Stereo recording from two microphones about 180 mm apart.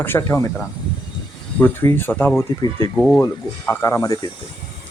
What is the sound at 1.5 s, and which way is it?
Speech, 10° left (ahead or behind).